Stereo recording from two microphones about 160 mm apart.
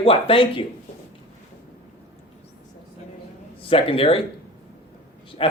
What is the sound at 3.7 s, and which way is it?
Speech, 35° left (ahead or behind).